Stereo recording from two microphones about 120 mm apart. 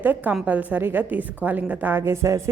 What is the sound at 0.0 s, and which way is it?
A woman's voice, 15° right (ahead or behind).